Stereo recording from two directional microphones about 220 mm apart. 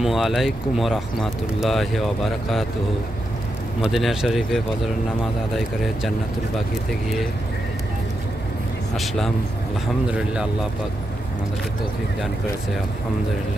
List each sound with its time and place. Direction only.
0.0 s speech: centre (ahead or behind)
3.8 s speech: centre (ahead or behind)
8.9 s speech: centre (ahead or behind)